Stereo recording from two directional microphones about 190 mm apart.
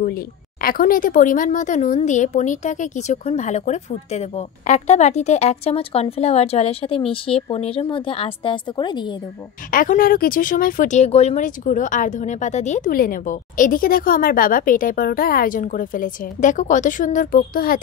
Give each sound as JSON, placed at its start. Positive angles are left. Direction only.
{"t": 0.6, "sound": "speech", "side_deg": 50}
{"t": 9.7, "sound": "speech", "side_deg": 45}